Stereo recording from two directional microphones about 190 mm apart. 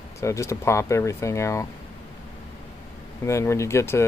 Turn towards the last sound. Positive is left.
turn(degrees=15)  # may be behind; listen again after turning